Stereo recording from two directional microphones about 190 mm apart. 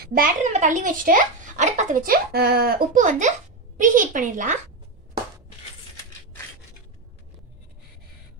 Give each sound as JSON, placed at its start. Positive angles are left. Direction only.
{"t": 0.0, "sound": "a child's voice", "side_deg": -45}